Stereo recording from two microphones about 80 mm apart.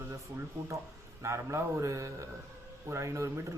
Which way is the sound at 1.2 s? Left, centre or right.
Right.